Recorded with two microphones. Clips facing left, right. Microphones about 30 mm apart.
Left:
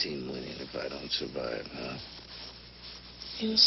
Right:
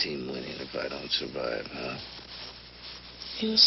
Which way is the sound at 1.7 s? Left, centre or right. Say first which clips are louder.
Right 3 dB; centre.